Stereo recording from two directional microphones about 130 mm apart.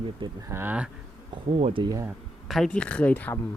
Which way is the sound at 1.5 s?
50° right (ahead or behind).